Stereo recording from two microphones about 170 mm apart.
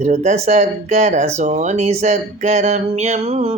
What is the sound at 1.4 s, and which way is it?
Speech, 45° right (ahead or behind).